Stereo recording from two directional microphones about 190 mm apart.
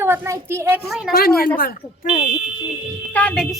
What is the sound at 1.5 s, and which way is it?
Speech, 50° left (ahead or behind).